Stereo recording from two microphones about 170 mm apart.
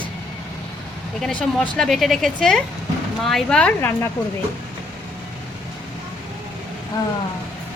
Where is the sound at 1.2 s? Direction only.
5° left (ahead or behind).